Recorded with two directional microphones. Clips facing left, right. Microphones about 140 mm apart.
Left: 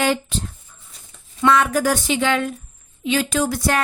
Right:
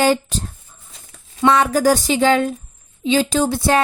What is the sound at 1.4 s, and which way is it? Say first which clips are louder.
Speech: right 3 dB; 30° right (ahead or behind).